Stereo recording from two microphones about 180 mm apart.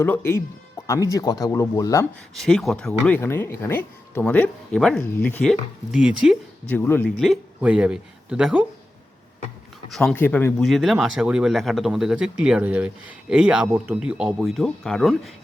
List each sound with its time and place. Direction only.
0.0 s speech: 15° left (ahead or behind)
2.3 s speech: centre (ahead or behind)
6.7 s speech: 10° left (ahead or behind)
7.6 s speech: 5° right (ahead or behind)
9.9 s speech: 5° left (ahead or behind)
10.6 s speech: centre (ahead or behind)